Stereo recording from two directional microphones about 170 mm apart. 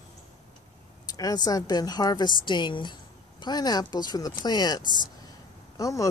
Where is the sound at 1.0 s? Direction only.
20° left (ahead or behind).